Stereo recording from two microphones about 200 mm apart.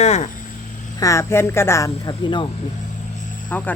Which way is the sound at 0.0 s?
35° left (ahead or behind).